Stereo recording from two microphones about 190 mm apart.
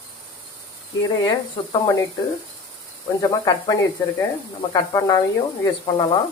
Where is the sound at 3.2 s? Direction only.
20° left (ahead or behind).